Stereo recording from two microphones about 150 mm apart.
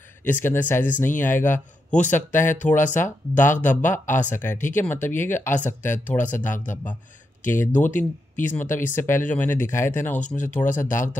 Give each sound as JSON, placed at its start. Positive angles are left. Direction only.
{"t": 0.2, "sound": "a man's voice", "side_deg": 15}
{"t": 6.0, "sound": "speech", "side_deg": 60}
{"t": 7.4, "sound": "a man's voice", "side_deg": 15}
{"t": 10.7, "sound": "speech", "side_deg": 60}